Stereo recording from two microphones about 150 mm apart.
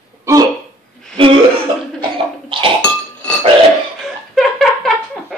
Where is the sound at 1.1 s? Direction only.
35° right (ahead or behind).